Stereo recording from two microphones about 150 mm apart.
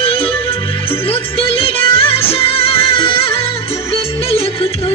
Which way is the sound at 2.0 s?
40° left (ahead or behind).